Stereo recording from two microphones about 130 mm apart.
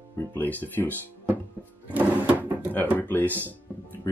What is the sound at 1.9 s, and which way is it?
Music, 10° right (ahead or behind).